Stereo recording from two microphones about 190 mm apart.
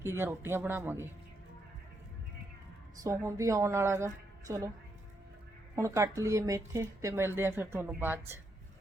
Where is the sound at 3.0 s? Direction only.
15° right (ahead or behind).